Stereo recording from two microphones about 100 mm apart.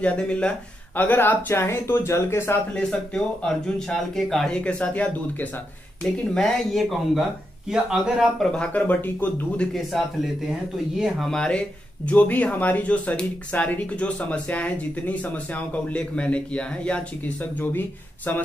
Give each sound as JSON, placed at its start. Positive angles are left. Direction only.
{"t": 0.0, "sound": "speech", "side_deg": 10}
{"t": 3.4, "sound": "speech", "side_deg": 5}
{"t": 8.4, "sound": "speech", "side_deg": 10}
{"t": 9.9, "sound": "speech", "side_deg": -5}